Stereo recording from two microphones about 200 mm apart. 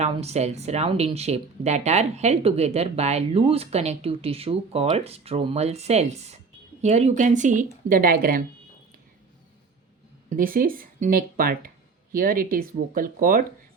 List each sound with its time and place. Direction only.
0.0 s speech: 30° right (ahead or behind)
10.2 s speech: 45° right (ahead or behind)